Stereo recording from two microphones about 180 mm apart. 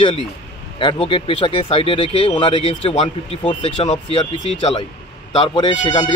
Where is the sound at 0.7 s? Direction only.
30° left (ahead or behind).